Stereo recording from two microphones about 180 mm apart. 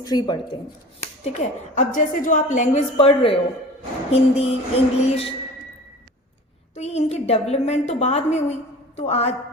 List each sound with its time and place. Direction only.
0.0 s speech: 25° left (ahead or behind)
1.2 s a woman's voice: 40° left (ahead or behind)
6.7 s a woman's voice: 40° left (ahead or behind)